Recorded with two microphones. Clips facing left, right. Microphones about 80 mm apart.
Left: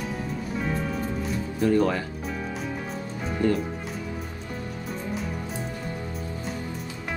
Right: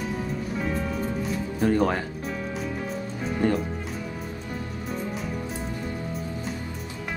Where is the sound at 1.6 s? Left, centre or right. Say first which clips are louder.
Left 1 dB; right.